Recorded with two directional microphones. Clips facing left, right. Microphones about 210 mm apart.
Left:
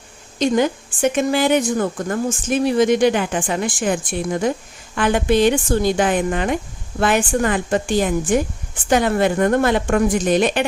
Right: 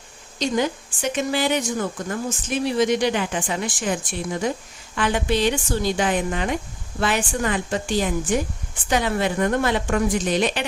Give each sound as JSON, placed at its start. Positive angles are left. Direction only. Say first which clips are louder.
{"t": 0.3, "sound": "speech", "louder": "left 5 dB", "side_deg": 55}